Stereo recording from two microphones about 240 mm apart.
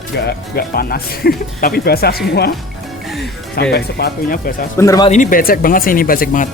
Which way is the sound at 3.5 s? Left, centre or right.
Left.